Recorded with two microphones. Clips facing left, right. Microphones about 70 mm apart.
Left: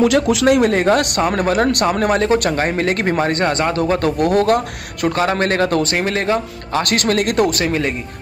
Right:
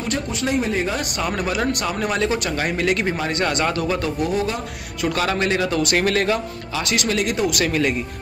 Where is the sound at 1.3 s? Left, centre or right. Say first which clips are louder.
Left 4 dB; left.